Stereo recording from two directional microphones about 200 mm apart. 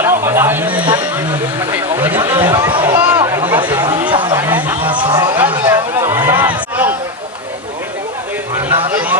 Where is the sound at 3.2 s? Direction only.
20° right (ahead or behind).